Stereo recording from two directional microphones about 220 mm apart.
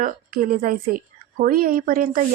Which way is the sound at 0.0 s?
40° right (ahead or behind).